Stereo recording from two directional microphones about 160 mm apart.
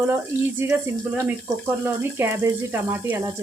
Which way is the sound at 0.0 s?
15° right (ahead or behind).